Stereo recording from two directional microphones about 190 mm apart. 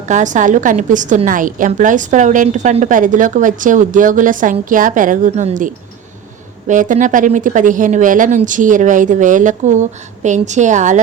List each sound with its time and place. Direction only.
0.1 s a woman's voice: 40° right (ahead or behind)